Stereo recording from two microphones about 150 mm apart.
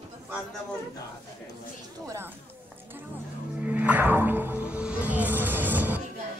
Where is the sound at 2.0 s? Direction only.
20° right (ahead or behind).